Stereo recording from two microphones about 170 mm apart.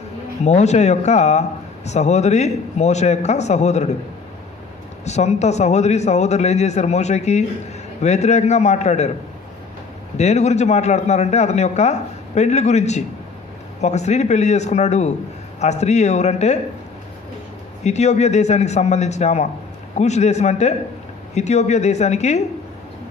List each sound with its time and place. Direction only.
0.4 s speech: 40° left (ahead or behind)
5.0 s speech: 40° left (ahead or behind)
10.2 s speech: 40° left (ahead or behind)
17.8 s speech: 40° left (ahead or behind)